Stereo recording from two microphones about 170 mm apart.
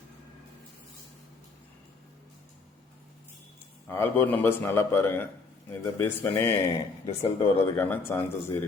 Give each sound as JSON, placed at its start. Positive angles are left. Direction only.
{"t": 3.8, "sound": "speech", "side_deg": 15}
{"t": 7.0, "sound": "speech", "side_deg": 30}
{"t": 7.6, "sound": "speech", "side_deg": 15}